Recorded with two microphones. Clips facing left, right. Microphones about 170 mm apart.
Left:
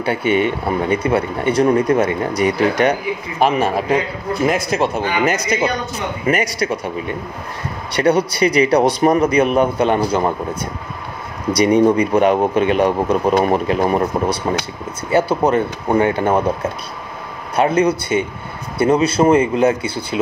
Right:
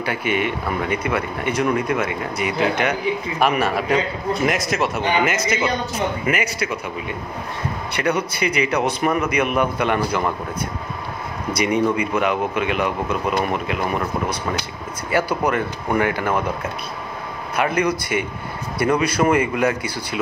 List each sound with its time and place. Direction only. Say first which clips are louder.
0.0 s speech: left 6 dB; 30° left (ahead or behind)
7.9 s speech: left 7 dB; 35° left (ahead or behind)
11.5 s speech: left 7 dB; 35° left (ahead or behind)
17.6 s speech: left 5 dB; 30° left (ahead or behind)